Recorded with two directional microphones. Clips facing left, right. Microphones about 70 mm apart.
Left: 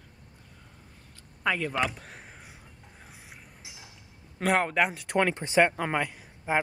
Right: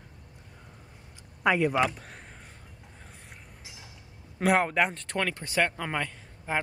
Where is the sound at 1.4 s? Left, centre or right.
Centre.